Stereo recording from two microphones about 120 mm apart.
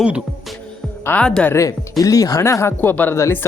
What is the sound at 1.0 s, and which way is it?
Speech, 10° left (ahead or behind).